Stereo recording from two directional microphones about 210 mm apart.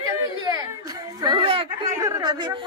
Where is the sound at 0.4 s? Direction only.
15° right (ahead or behind).